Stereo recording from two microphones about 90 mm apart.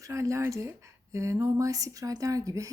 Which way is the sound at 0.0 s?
35° right (ahead or behind).